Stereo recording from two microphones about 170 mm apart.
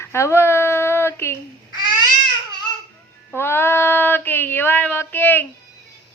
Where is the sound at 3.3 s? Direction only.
15° left (ahead or behind).